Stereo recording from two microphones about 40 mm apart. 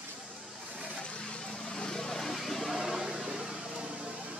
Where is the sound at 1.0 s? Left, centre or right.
Left.